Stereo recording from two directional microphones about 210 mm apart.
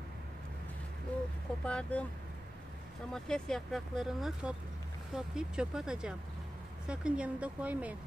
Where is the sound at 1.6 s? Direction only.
5° left (ahead or behind).